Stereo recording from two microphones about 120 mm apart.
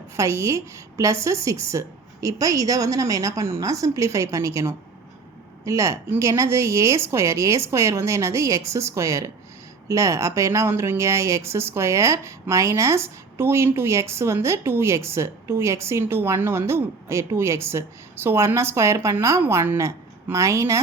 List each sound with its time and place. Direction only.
0.2 s speech: 25° right (ahead or behind)